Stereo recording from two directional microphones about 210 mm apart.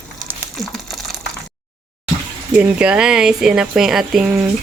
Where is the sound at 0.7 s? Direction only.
Centre (ahead or behind).